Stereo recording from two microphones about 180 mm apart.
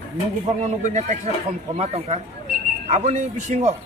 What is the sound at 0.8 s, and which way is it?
Speech, 40° right (ahead or behind).